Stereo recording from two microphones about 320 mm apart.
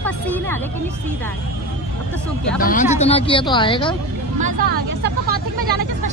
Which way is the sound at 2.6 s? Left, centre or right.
Left.